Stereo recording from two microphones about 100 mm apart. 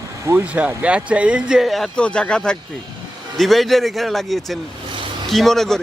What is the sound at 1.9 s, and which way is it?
A man's voice, 10° left (ahead or behind).